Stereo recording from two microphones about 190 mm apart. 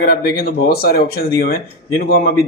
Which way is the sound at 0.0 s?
55° left (ahead or behind).